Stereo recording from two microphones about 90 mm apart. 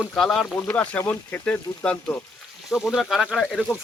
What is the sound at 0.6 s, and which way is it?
Speech, 15° left (ahead or behind).